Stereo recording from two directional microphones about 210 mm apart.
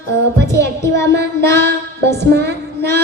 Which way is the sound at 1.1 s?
55° right (ahead or behind).